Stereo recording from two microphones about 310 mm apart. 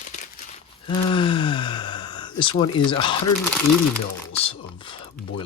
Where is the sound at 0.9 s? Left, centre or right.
Centre.